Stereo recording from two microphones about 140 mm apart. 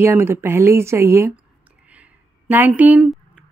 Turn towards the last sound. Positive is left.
turn(degrees=-10)  # may be behind; listen again after turning